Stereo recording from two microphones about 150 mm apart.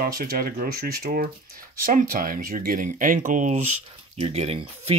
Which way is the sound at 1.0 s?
70° right (ahead or behind).